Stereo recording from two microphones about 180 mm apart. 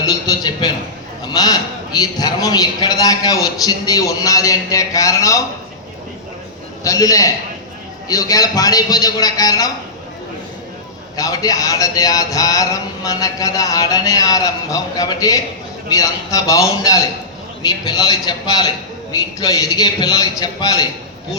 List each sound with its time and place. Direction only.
0.0 s a man's voice: 20° left (ahead or behind)
6.8 s speech: 20° left (ahead or behind)
11.2 s speech: 20° left (ahead or behind)